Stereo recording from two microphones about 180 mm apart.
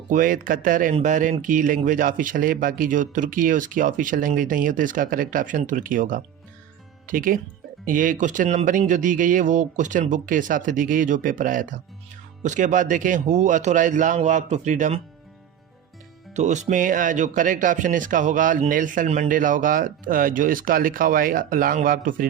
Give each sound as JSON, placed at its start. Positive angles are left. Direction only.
{"t": 0.1, "sound": "speech", "side_deg": -50}
{"t": 16.3, "sound": "speech", "side_deg": -40}